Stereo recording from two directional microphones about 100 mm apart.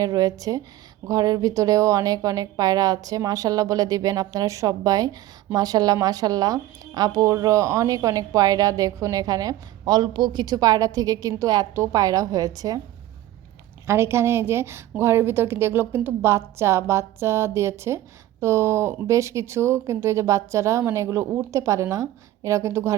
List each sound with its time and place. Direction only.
0.0 s a woman's voice: 35° right (ahead or behind)
13.8 s a woman's voice: 25° right (ahead or behind)